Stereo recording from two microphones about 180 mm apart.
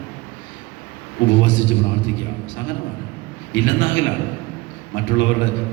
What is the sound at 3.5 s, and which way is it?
A man's voice, 90° left.